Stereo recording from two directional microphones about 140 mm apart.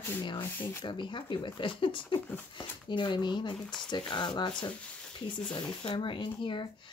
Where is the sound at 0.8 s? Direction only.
35° left (ahead or behind).